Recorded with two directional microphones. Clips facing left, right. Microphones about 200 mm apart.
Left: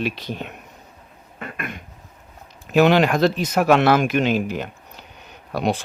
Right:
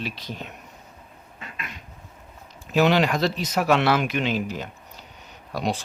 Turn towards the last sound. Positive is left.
turn(degrees=60)  # may be behind; listen again after turning